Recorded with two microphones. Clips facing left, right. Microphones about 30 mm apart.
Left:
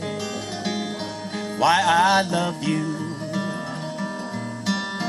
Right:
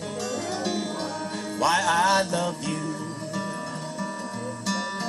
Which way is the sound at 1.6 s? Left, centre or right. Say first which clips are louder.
Left 4 dB; left.